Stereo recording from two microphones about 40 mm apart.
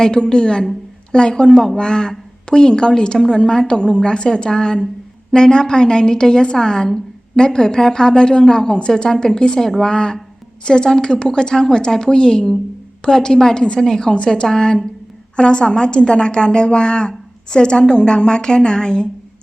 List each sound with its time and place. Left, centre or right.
0.0 s a woman's voice: centre
9.9 s a woman's voice: centre